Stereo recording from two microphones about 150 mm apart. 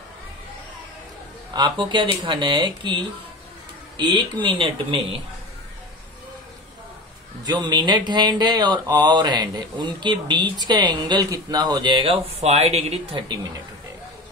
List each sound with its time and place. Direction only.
1.5 s speech: 30° right (ahead or behind)
7.4 s speech: 30° right (ahead or behind)